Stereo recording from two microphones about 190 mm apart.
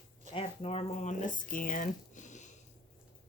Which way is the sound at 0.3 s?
30° left (ahead or behind).